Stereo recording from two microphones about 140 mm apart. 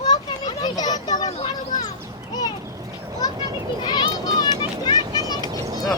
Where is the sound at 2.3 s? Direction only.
30° left (ahead or behind).